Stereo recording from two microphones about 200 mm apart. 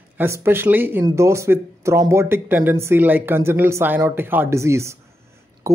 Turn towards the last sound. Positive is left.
turn(degrees=-15)  # may be behind; listen again after turning